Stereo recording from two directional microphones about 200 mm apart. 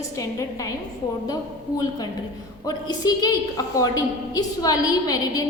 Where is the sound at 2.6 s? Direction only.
20° left (ahead or behind).